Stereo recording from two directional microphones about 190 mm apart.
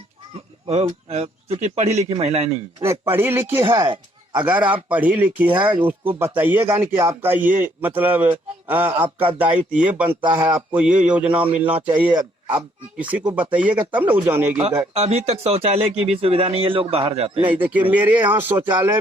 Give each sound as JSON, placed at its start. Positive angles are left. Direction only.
{"t": 0.7, "sound": "a man's voice", "side_deg": -35}
{"t": 2.8, "sound": "speech", "side_deg": -15}
{"t": 3.6, "sound": "speech", "side_deg": -25}
{"t": 4.4, "sound": "speech", "side_deg": -10}
{"t": 10.2, "sound": "speech", "side_deg": -25}
{"t": 10.5, "sound": "speech", "side_deg": -5}
{"t": 14.9, "sound": "a man's voice", "side_deg": -35}
{"t": 17.4, "sound": "speech", "side_deg": -10}